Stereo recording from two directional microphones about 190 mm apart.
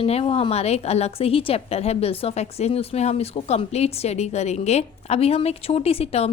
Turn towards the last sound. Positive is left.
turn(degrees=30)  # may be behind; listen again after turning